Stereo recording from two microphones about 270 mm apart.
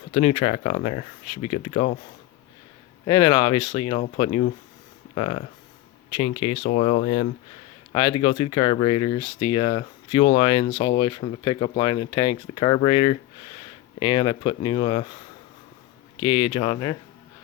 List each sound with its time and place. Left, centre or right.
0.1 s speech: left
3.1 s speech: centre
16.2 s speech: centre